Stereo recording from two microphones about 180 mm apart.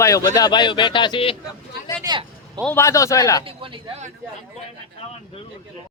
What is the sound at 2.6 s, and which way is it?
Speech, 15° left (ahead or behind).